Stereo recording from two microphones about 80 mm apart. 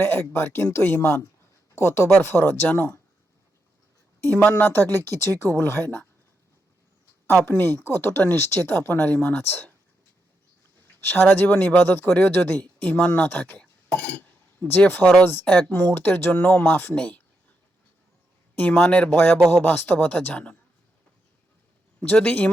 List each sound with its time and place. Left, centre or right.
0.0 s speech: left
4.4 s speech: left
7.3 s speech: left
10.8 s speech: left
15.4 s speech: centre
16.0 s speech: left
18.5 s speech: left
19.1 s speech: left
22.0 s speech: left